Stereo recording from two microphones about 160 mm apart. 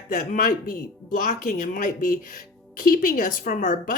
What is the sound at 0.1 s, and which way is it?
Speech, 55° left (ahead or behind).